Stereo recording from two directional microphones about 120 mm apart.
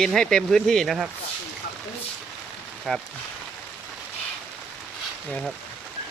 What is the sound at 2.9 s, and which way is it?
Speech, 5° left (ahead or behind).